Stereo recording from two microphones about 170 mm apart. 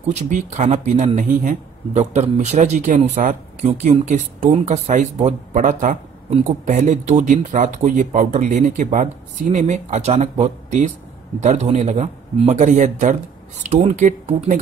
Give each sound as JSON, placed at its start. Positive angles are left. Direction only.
{"t": 0.1, "sound": "speech", "side_deg": -45}